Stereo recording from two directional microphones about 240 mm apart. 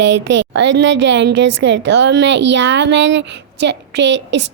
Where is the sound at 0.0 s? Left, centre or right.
Right.